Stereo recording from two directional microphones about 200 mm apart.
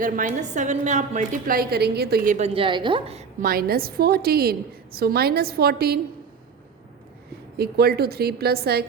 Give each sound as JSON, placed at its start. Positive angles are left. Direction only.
{"t": 0.0, "sound": "a woman's voice", "side_deg": -40}
{"t": 3.4, "sound": "a woman's voice", "side_deg": -50}
{"t": 7.5, "sound": "a woman's voice", "side_deg": -50}